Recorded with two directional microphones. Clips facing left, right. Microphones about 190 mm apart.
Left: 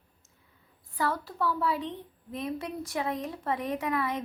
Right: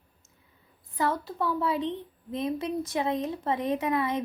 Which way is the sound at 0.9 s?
20° right (ahead or behind).